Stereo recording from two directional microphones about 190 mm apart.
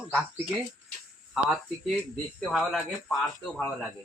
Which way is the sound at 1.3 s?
Centre (ahead or behind).